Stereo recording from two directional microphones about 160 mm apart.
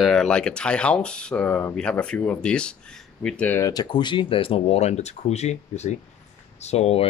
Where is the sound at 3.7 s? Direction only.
25° left (ahead or behind).